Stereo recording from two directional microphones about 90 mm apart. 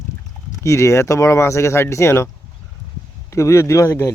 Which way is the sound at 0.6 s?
35° left (ahead or behind).